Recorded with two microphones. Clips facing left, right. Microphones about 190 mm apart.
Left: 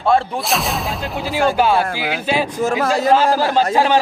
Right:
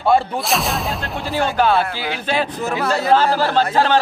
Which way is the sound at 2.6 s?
45° left (ahead or behind).